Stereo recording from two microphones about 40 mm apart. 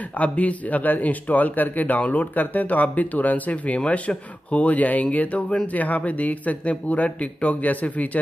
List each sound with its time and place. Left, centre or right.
0.2 s a man's voice: left